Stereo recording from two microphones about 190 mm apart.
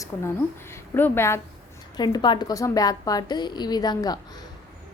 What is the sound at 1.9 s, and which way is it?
A woman's voice, 20° left (ahead or behind).